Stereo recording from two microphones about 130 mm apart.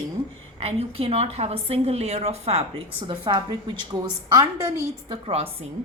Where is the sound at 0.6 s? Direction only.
50° right (ahead or behind); by 4.6 s 25° right (ahead or behind).